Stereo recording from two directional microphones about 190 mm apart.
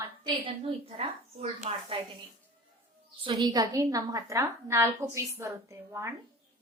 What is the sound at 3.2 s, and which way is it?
A woman's voice, 20° right (ahead or behind).